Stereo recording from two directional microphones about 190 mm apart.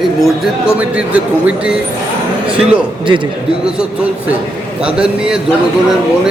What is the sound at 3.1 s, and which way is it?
Speech, 25° right (ahead or behind).